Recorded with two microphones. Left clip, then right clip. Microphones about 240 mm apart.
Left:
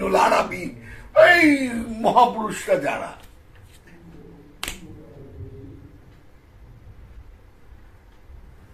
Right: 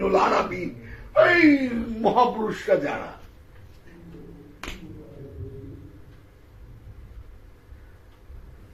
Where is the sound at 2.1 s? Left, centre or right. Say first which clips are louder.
Left 6 dB; centre.